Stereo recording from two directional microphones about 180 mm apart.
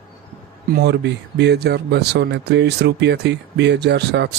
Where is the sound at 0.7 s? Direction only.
65° right (ahead or behind).